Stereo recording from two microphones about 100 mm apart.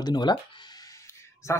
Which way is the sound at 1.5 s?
30° left (ahead or behind).